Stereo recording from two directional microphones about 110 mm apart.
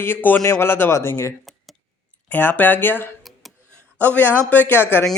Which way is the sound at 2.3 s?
15° left (ahead or behind).